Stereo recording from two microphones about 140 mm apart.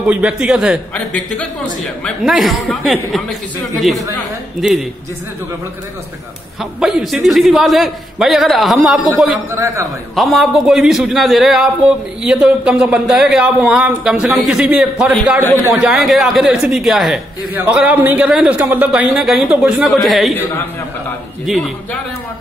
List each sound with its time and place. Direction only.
0.0 s a man's voice: 10° right (ahead or behind)
0.9 s a man's voice: 5° left (ahead or behind)
4.6 s a man's voice: centre (ahead or behind)
6.6 s a man's voice: 5° right (ahead or behind)
9.5 s a man's voice: 20° right (ahead or behind)
10.1 s a man's voice: centre (ahead or behind)
18.9 s a man's voice: 5° right (ahead or behind)